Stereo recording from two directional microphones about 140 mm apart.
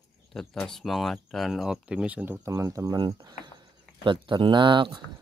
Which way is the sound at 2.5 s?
20° right (ahead or behind).